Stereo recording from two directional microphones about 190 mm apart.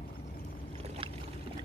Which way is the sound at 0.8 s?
30° right (ahead or behind).